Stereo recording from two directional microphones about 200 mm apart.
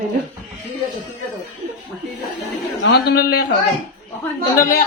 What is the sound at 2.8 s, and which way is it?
Speech, 55° left (ahead or behind).